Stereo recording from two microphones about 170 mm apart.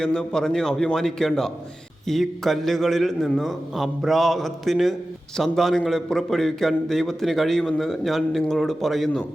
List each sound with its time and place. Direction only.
0.0 s a man's voice: 5° left (ahead or behind)